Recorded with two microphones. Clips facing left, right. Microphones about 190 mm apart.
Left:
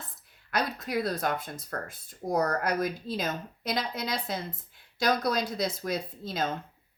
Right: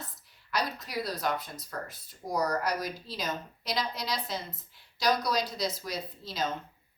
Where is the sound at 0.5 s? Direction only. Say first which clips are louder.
Left 3 dB; 55° left (ahead or behind).